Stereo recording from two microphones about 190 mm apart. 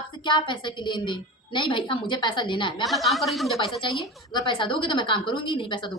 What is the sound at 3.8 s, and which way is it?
A woman's voice, 25° left (ahead or behind).